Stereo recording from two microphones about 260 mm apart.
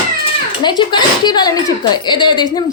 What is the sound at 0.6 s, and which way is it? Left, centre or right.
Speech, centre.